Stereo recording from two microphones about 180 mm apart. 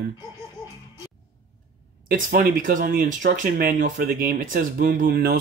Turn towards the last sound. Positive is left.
turn(degrees=-60)  # may be behind; listen again after turning